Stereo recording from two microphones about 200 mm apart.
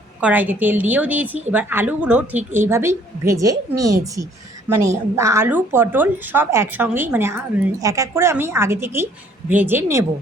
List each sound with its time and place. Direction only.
0.2 s a woman's voice: 10° right (ahead or behind)